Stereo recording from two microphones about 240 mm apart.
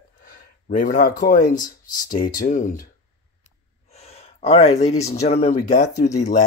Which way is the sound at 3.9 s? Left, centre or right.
Left.